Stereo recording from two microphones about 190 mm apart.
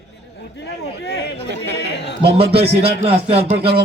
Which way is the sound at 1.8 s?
65° left (ahead or behind).